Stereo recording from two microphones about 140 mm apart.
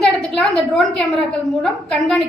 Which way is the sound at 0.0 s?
5° left (ahead or behind).